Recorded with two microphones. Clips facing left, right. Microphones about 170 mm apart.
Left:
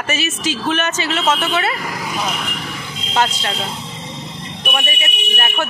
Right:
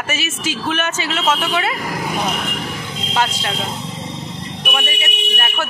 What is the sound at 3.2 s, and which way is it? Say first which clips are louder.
Speech: left 2 dB; 10° right (ahead or behind).